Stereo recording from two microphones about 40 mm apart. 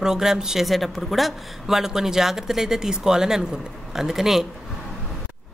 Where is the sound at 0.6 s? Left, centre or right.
Centre.